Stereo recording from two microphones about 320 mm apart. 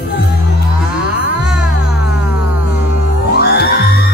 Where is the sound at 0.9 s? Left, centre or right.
Centre.